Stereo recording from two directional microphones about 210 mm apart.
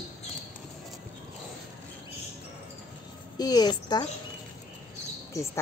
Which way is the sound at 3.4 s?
20° left (ahead or behind).